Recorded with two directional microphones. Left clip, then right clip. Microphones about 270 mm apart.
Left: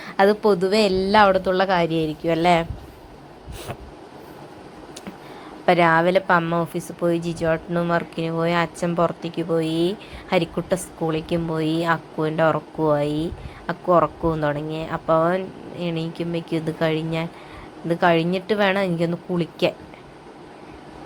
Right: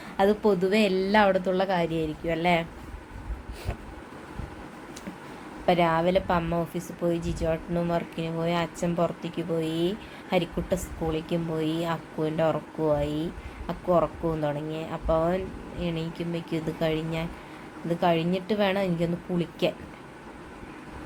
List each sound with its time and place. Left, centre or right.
0.0 s a woman's voice: centre
5.6 s a woman's voice: centre